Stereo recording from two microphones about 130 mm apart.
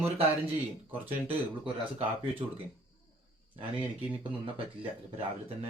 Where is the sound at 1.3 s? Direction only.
45° right (ahead or behind).